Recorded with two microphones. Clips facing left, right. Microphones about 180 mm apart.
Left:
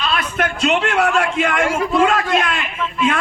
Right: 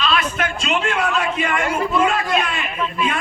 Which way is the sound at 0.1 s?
60° left (ahead or behind).